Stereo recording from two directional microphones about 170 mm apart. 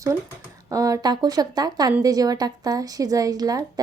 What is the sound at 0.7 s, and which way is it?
A woman's voice, 20° right (ahead or behind).